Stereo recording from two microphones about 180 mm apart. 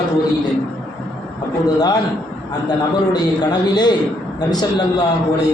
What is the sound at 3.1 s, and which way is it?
Speech, 25° left (ahead or behind).